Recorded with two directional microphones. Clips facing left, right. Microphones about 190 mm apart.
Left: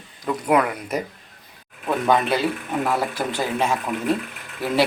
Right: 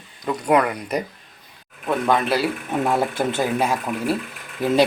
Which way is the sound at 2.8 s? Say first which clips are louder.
Right 4 dB; 25° right (ahead or behind).